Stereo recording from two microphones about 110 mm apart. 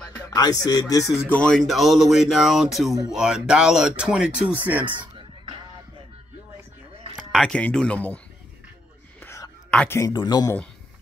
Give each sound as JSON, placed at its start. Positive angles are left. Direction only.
{"t": 0.3, "sound": "music", "side_deg": 35}
{"t": 1.2, "sound": "speech", "side_deg": 10}
{"t": 1.7, "sound": "a sound", "side_deg": 0}
{"t": 3.1, "sound": "speech", "side_deg": -5}
{"t": 4.8, "sound": "a sound", "side_deg": -50}
{"t": 7.2, "sound": "a sound", "side_deg": 0}
{"t": 7.6, "sound": "speech", "side_deg": 10}
{"t": 9.2, "sound": "whispering", "side_deg": 25}
{"t": 9.8, "sound": "speech", "side_deg": 25}
{"t": 10.1, "sound": "music", "side_deg": 40}